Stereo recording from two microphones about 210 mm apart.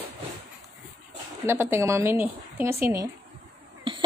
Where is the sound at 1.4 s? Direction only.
10° right (ahead or behind).